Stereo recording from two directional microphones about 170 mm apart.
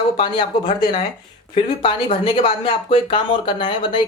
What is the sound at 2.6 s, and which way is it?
Speech, 30° left (ahead or behind).